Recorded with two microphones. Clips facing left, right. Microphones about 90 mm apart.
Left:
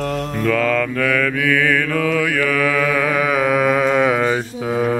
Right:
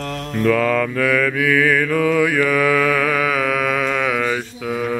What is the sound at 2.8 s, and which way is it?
Mantra, centre (ahead or behind).